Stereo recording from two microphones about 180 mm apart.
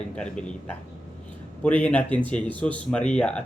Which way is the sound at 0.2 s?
5° left (ahead or behind).